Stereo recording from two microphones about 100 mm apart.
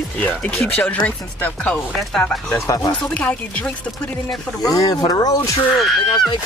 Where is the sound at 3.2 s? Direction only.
10° left (ahead or behind).